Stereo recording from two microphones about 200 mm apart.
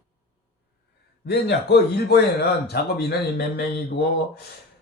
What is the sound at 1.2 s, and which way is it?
Speech, 55° left (ahead or behind).